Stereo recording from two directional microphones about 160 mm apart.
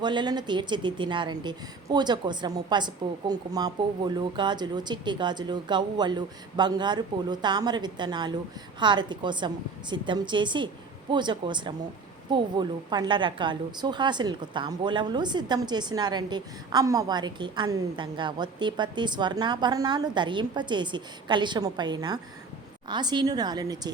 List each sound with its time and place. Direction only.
0.0 s a woman's voice: 30° right (ahead or behind)